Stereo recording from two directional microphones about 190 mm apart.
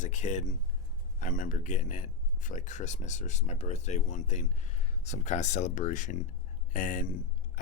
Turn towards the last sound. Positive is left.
turn(degrees=45)  # may be behind; listen again after turning